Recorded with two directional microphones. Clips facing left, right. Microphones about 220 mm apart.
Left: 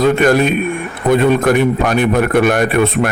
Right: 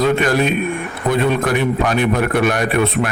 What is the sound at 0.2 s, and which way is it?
A man's voice, 50° left (ahead or behind).